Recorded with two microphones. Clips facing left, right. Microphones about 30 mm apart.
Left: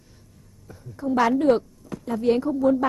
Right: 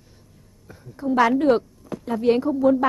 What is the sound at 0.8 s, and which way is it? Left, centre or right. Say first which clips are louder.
Speech: right 2 dB; centre.